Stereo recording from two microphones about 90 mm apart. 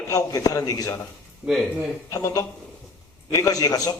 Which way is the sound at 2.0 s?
35° left (ahead or behind).